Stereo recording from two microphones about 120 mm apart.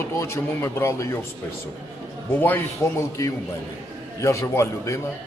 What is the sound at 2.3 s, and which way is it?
Speech, 15° left (ahead or behind).